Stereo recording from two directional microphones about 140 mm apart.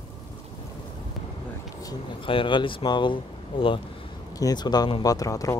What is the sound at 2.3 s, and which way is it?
Speech, 35° left (ahead or behind).